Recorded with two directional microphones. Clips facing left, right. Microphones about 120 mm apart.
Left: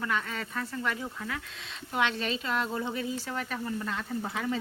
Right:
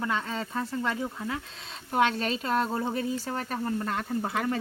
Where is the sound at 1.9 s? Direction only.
40° right (ahead or behind).